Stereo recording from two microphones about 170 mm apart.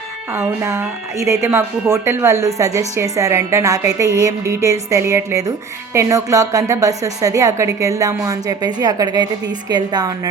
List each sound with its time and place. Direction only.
0.3 s a woman's voice: 15° right (ahead or behind)